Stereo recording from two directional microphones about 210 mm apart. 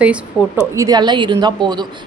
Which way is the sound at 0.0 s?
10° right (ahead or behind).